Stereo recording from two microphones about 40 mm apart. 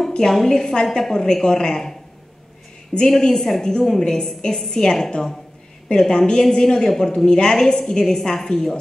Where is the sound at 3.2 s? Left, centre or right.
Centre.